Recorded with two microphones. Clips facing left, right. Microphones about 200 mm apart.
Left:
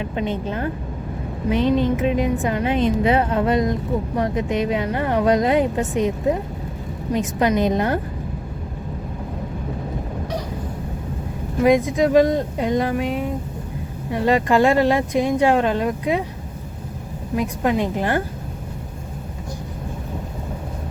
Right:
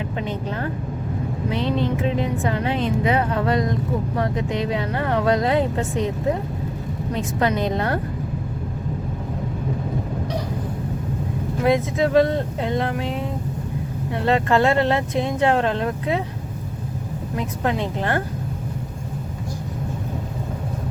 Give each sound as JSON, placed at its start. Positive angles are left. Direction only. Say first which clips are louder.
{"t": 1.5, "sound": "speech", "louder": "left 5 dB", "side_deg": 15}
{"t": 11.6, "sound": "speech", "louder": "left 4 dB", "side_deg": 15}
{"t": 14.1, "sound": "speech", "louder": "left 2 dB", "side_deg": 10}
{"t": 17.3, "sound": "speech", "louder": "left 4 dB", "side_deg": 10}